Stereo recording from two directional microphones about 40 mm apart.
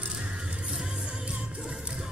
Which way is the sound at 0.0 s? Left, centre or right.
Right.